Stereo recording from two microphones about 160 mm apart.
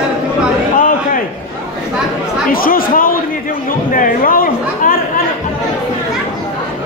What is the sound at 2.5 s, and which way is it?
Speech, 65° left (ahead or behind).